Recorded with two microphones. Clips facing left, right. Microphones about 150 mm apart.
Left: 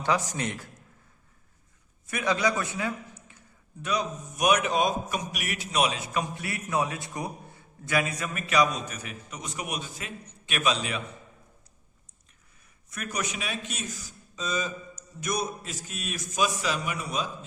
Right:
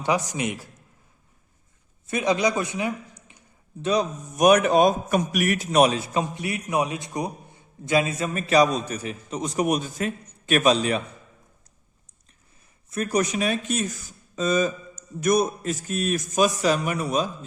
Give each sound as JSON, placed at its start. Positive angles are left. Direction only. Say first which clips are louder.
{"t": 0.0, "sound": "a man's voice", "louder": "right 3 dB", "side_deg": -15}
{"t": 2.0, "sound": "a sound", "louder": "right 4 dB", "side_deg": -20}
{"t": 3.8, "sound": "speech", "louder": "right 6 dB", "side_deg": -40}
{"t": 6.1, "sound": "a man's voice", "louder": "right 5 dB", "side_deg": -20}
{"t": 12.9, "sound": "speech", "louder": "right 10 dB", "side_deg": -35}